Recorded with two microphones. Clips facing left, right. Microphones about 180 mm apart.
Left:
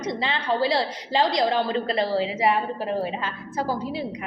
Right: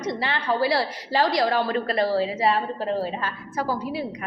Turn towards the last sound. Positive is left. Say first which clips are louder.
# even
turn(degrees=25)  # may be behind; listen again after turning